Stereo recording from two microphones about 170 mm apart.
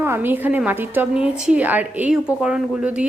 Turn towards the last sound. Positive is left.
turn(degrees=-5)  # may be behind; listen again after turning